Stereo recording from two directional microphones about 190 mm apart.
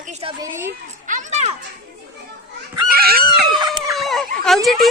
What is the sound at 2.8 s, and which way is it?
Screaming, 55° right (ahead or behind).